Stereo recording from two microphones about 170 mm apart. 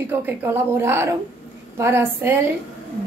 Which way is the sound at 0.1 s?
10° right (ahead or behind).